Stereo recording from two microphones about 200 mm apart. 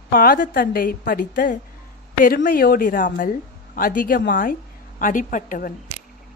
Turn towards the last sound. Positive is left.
turn(degrees=40)  # may be behind; listen again after turning